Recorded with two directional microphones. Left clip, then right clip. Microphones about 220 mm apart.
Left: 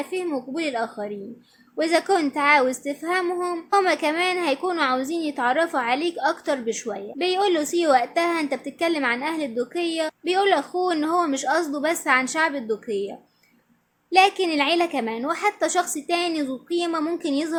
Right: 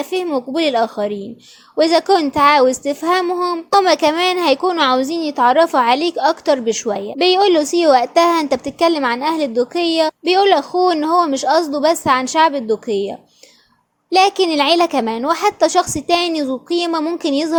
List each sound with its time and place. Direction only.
0.0 s a woman's voice: 30° right (ahead or behind)